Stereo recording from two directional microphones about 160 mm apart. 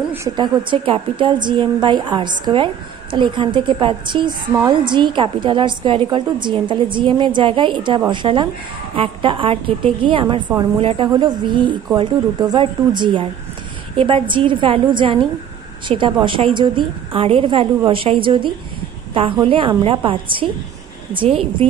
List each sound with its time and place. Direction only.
0.4 s a woman's voice: 30° right (ahead or behind)